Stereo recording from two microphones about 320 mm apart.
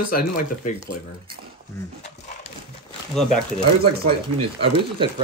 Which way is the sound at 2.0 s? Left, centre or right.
Left.